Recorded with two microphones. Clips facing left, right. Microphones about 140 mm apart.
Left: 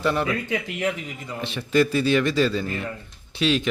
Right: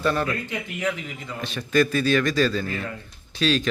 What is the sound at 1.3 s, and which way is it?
A man's voice, 20° left (ahead or behind).